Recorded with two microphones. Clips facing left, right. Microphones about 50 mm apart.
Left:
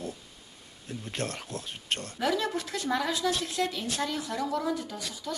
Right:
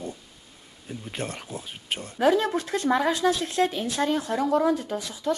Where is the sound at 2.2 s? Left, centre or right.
Right.